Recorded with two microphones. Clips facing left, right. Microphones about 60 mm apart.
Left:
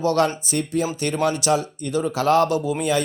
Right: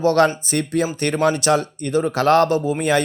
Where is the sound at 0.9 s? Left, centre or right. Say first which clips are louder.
Right 3 dB; right.